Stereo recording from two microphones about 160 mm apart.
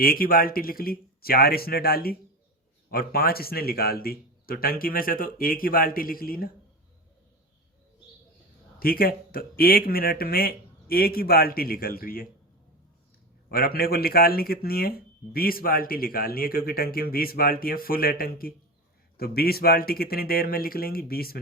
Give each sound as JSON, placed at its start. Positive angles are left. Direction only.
{"t": 0.0, "sound": "speech", "side_deg": 65}
{"t": 8.8, "sound": "speech", "side_deg": 65}
{"t": 13.5, "sound": "speech", "side_deg": 70}